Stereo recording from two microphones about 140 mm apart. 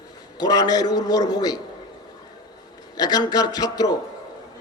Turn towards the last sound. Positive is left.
turn(degrees=30)  # may be behind; listen again after turning